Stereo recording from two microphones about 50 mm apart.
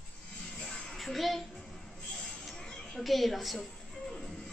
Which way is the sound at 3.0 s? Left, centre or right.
Centre.